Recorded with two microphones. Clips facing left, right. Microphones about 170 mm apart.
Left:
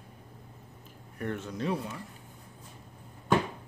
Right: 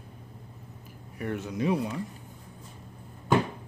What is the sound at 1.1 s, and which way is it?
Speech, 10° right (ahead or behind).